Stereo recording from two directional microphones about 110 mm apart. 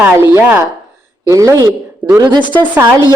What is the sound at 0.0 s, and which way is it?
Speech, 20° right (ahead or behind).